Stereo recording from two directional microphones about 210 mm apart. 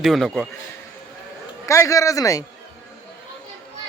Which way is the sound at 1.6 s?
15° left (ahead or behind).